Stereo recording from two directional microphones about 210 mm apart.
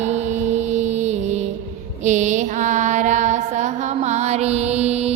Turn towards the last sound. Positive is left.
turn(degrees=-30)  # may be behind; listen again after turning